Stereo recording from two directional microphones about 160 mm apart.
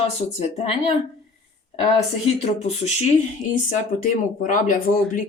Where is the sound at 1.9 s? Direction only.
40° left (ahead or behind).